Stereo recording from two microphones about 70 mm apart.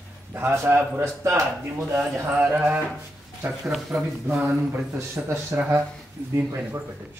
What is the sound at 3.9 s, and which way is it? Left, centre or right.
Speech, right.